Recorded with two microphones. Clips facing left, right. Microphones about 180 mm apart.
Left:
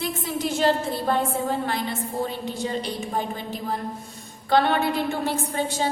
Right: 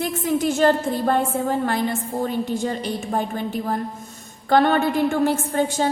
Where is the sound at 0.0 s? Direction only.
50° right (ahead or behind).